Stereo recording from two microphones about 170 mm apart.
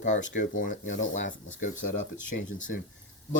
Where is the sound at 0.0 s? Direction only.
45° left (ahead or behind).